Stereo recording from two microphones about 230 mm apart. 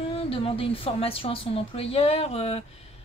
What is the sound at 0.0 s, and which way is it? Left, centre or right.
Speech, left.